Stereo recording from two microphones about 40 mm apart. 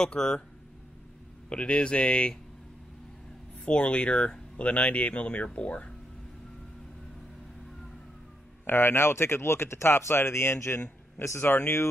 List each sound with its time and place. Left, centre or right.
0.0 s speech: centre
1.5 s speech: left
3.6 s speech: left
8.6 s speech: left
11.1 s speech: left